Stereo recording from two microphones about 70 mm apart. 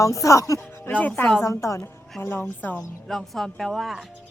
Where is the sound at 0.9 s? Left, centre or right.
Left.